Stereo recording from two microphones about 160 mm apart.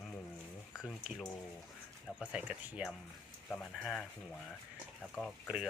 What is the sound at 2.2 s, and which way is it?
Speech, 5° right (ahead or behind).